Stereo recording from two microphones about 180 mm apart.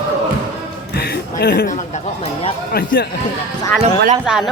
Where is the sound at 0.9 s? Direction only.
65° left (ahead or behind).